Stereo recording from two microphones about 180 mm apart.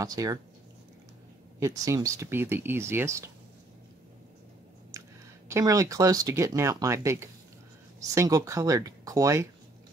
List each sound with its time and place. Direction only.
0.0 s speech: 20° right (ahead or behind)
1.6 s speech: 15° right (ahead or behind)
5.5 s speech: 20° right (ahead or behind)